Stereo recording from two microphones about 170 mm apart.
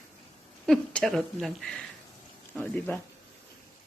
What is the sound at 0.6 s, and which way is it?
Speech, centre (ahead or behind).